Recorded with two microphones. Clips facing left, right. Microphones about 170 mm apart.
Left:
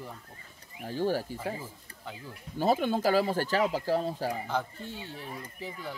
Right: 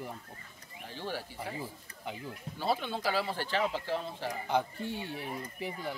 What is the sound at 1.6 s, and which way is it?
Speech, 15° right (ahead or behind).